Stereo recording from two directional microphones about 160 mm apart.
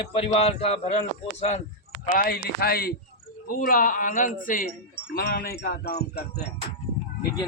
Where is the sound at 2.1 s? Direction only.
65° left (ahead or behind).